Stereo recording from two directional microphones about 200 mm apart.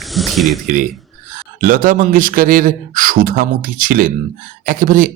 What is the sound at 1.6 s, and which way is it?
A man's voice, 45° right (ahead or behind).